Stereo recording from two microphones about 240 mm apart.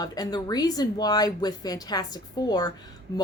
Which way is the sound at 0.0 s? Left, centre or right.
Centre.